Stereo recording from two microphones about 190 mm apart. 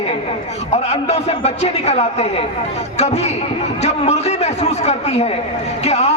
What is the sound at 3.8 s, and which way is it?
A man's voice, 35° left (ahead or behind).